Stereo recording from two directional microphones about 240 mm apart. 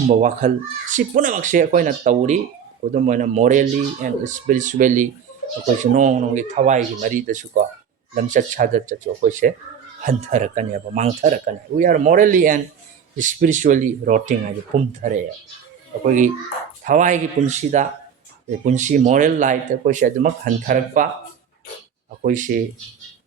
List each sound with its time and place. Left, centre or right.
0.2 s speech: right
16.0 s speech: right
22.2 s speech: right